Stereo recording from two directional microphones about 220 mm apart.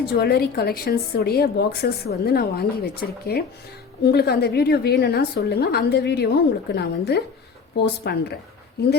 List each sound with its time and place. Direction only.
0.0 s a woman's voice: 45° left (ahead or behind)